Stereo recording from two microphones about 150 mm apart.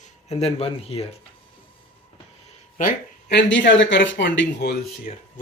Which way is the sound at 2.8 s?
70° left (ahead or behind).